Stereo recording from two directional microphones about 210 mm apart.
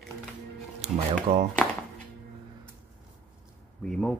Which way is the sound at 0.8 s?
30° right (ahead or behind).